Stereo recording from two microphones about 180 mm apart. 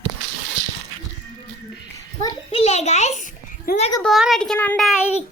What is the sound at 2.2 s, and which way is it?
A child's voice, 35° left (ahead or behind).